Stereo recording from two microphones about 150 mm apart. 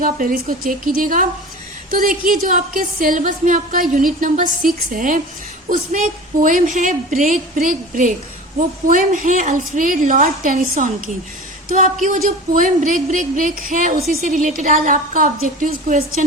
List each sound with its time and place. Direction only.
0.0 s a woman's voice: 65° right (ahead or behind)
12.0 s a woman's voice: 60° right (ahead or behind)